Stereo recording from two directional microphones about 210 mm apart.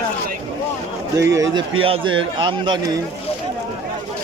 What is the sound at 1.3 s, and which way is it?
A man's voice, 20° right (ahead or behind).